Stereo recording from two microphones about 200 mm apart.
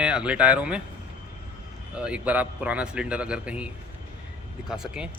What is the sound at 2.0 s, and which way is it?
Speech, 5° right (ahead or behind).